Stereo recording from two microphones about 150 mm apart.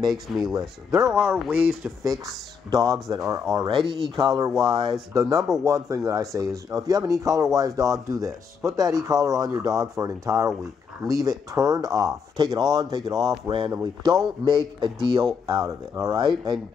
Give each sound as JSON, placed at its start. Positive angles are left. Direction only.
{"t": 0.1, "sound": "speech", "side_deg": 0}
{"t": 2.0, "sound": "speech", "side_deg": -25}
{"t": 4.2, "sound": "speech", "side_deg": -25}
{"t": 4.5, "sound": "speech", "side_deg": 0}
{"t": 5.1, "sound": "speech", "side_deg": -20}